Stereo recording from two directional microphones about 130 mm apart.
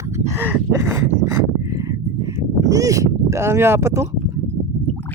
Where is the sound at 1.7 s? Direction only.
25° right (ahead or behind).